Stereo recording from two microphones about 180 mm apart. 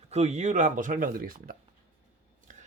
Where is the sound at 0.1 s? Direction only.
40° right (ahead or behind).